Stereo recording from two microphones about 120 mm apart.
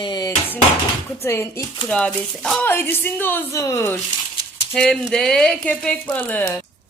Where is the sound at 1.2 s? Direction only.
20° left (ahead or behind).